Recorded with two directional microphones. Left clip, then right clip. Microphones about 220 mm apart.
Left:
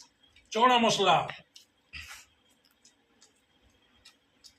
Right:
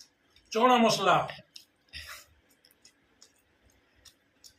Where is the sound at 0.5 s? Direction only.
10° left (ahead or behind).